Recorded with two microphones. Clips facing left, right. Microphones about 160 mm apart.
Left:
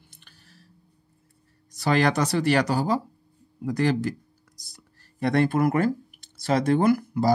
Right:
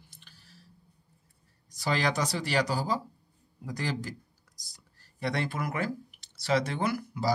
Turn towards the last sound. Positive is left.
turn(degrees=50)  # may be behind; listen again after turning